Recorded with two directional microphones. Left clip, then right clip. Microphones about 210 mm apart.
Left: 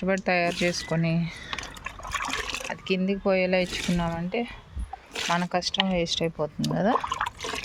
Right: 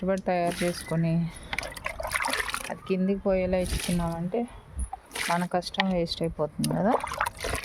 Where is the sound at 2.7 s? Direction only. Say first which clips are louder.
Left 1 dB; centre (ahead or behind).